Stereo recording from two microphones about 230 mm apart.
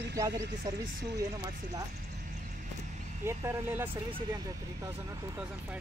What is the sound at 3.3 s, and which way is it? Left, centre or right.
Speech, centre.